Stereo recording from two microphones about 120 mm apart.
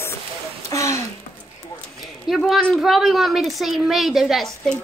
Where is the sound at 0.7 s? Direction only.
25° left (ahead or behind).